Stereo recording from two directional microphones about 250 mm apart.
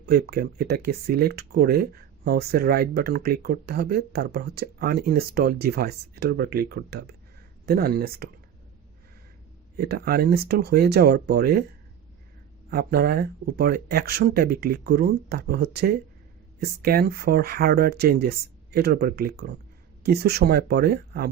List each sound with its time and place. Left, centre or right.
0.0 s speech: right
9.7 s speech: right
12.7 s speech: right